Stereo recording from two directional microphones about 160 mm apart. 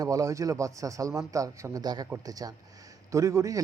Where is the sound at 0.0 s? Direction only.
20° right (ahead or behind).